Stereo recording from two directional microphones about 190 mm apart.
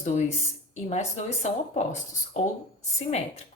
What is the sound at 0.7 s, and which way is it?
Speech, 35° left (ahead or behind).